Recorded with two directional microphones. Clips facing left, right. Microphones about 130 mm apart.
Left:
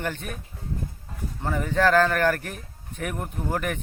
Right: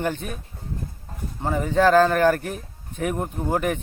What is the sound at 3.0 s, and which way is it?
Speech, 30° right (ahead or behind).